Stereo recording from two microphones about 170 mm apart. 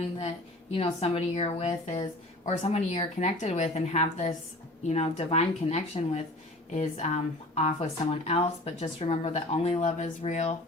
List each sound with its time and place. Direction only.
0.0 s a woman's voice: 35° left (ahead or behind)